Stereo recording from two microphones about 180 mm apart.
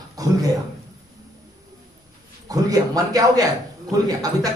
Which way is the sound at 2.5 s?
20° right (ahead or behind).